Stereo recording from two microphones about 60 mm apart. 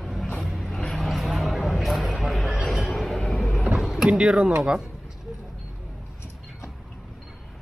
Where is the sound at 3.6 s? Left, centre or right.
Centre.